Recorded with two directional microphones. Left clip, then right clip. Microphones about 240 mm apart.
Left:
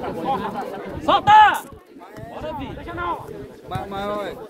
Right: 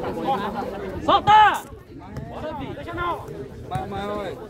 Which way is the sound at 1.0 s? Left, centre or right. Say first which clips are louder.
Left 2 dB; left.